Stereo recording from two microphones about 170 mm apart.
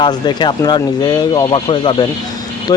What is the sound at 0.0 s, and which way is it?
Speech, 25° left (ahead or behind).